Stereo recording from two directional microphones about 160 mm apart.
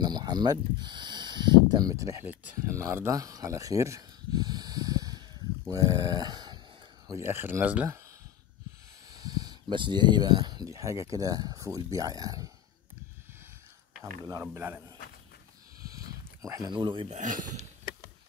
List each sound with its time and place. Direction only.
0.0 s speech: 25° right (ahead or behind)
7.1 s speech: 15° right (ahead or behind)
9.1 s speech: 25° right (ahead or behind)
14.2 s speech: 20° right (ahead or behind)
15.9 s a sound: 20° right (ahead or behind)
17.1 s speech: 55° right (ahead or behind)